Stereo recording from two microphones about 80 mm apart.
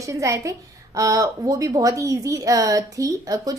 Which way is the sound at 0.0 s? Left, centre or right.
Right.